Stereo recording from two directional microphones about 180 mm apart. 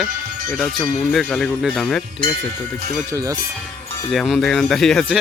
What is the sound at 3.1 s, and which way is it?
Speech, 20° right (ahead or behind).